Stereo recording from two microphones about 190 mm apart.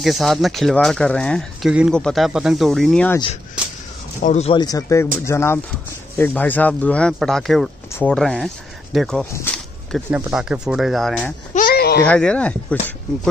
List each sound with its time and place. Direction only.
0.0 s speech: centre (ahead or behind)
4.2 s speech: 35° left (ahead or behind)
4.6 s speech: 20° left (ahead or behind)
11.5 s a sound: 50° left (ahead or behind)
12.1 s speech: 5° left (ahead or behind)